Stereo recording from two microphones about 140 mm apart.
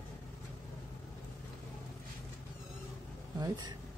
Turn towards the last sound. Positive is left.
turn(degrees=-30)  # may be behind; listen again after turning